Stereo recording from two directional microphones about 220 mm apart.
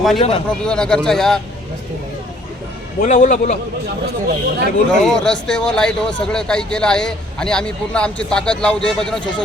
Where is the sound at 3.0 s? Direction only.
35° left (ahead or behind).